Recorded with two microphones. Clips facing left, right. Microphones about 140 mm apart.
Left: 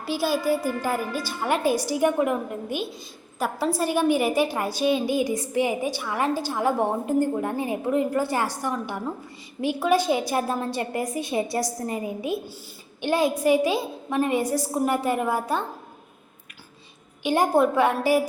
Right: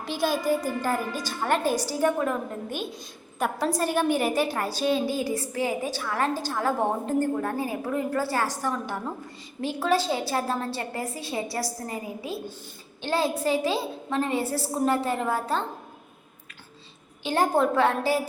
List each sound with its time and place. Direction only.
0.0 s a woman's voice: 5° left (ahead or behind)
9.6 s a woman's voice: 10° left (ahead or behind)
17.2 s a woman's voice: 15° left (ahead or behind)